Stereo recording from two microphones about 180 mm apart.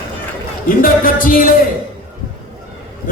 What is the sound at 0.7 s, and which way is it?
Speech, 50° left (ahead or behind).